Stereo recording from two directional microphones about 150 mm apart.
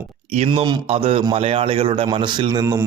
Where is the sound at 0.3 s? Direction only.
35° right (ahead or behind).